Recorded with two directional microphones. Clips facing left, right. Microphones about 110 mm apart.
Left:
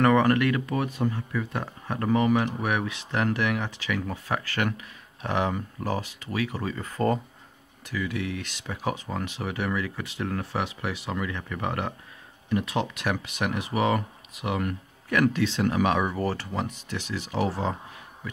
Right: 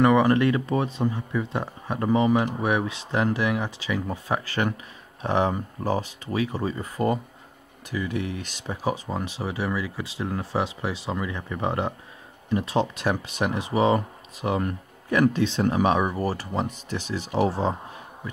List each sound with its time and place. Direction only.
0.0 s speech: 15° right (ahead or behind)
0.4 s speech: 25° right (ahead or behind)
9.6 s speech: 15° right (ahead or behind)
16.1 s speech: 15° right (ahead or behind)
16.9 s speech: 35° right (ahead or behind)